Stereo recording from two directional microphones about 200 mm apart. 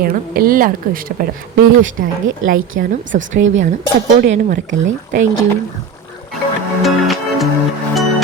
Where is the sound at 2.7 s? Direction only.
60° right (ahead or behind).